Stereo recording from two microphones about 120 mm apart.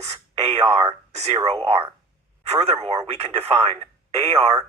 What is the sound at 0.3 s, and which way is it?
Speech, 60° right (ahead or behind).